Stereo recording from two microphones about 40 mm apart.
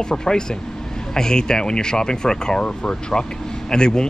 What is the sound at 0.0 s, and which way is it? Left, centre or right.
Speech, centre.